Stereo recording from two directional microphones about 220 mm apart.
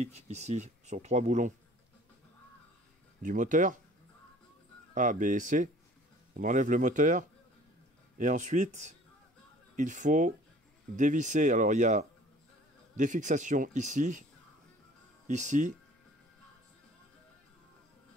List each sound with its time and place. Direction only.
0.0 s speech: 30° right (ahead or behind)
3.2 s speech: 35° right (ahead or behind)
4.9 s speech: 35° right (ahead or behind)
15.2 s speech: 35° right (ahead or behind)